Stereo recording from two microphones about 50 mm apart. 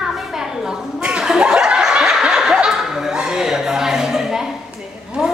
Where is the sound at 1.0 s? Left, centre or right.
Centre.